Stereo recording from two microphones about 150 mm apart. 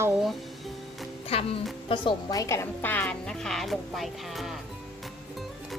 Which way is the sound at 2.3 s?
20° left (ahead or behind).